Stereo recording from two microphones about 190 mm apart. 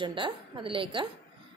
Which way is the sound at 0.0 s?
25° right (ahead or behind).